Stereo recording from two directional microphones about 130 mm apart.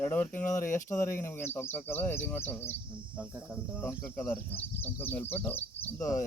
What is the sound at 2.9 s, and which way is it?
Speech, 10° right (ahead or behind).